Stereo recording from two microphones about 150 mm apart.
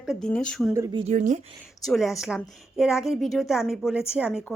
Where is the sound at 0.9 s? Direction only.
50° right (ahead or behind).